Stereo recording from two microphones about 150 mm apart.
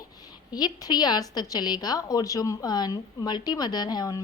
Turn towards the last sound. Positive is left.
turn(degrees=25)  # may be behind; listen again after turning